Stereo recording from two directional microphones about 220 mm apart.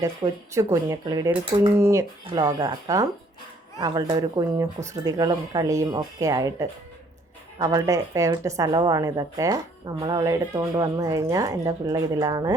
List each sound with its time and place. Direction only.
0.0 s speech: 15° right (ahead or behind)